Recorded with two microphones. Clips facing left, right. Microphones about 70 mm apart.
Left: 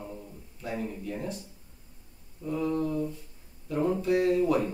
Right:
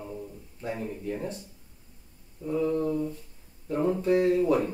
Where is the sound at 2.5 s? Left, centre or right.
Right.